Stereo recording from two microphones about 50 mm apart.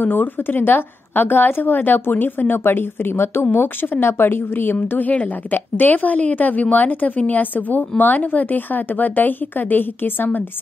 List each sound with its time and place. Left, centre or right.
0.0 s a woman's voice: left
4.7 s a woman's voice: left